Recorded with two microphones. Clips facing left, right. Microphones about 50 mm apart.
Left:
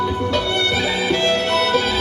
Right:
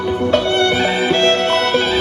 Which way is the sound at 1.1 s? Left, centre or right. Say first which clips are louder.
Right 3 dB; right.